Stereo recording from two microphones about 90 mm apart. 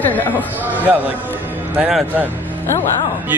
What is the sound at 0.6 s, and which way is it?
A man's voice, 20° right (ahead or behind).